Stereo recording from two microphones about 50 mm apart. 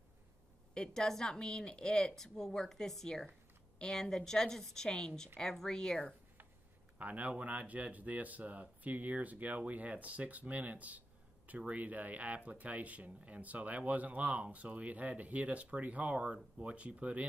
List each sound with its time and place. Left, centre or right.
0.7 s a woman's voice: centre
7.0 s speech: right